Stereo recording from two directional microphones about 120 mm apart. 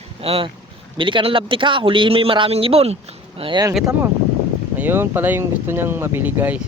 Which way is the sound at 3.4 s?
45° right (ahead or behind).